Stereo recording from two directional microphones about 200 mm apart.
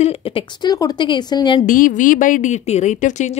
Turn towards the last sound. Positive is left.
turn(degrees=35)  # may be behind; listen again after turning